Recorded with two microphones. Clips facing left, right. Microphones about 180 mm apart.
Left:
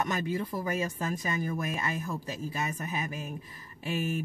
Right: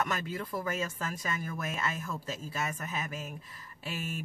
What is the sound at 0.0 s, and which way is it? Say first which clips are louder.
Speech: left 3 dB; 20° left (ahead or behind).